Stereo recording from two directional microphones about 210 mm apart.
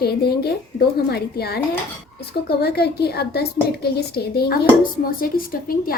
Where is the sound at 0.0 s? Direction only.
50° left (ahead or behind).